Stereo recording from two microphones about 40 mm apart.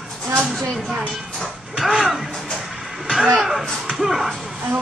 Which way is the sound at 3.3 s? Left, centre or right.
Centre.